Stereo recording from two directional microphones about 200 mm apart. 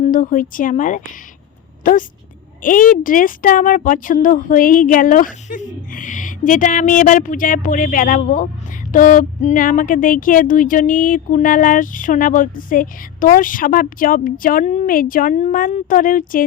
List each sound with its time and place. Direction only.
0.0 s speech: 40° left (ahead or behind)